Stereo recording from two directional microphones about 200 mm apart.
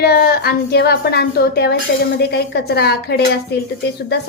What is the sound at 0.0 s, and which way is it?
Speech, 55° left (ahead or behind).